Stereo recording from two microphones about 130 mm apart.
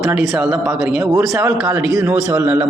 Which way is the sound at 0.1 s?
5° right (ahead or behind).